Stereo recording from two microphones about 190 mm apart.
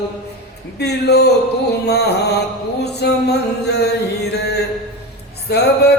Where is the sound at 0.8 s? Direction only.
60° left (ahead or behind).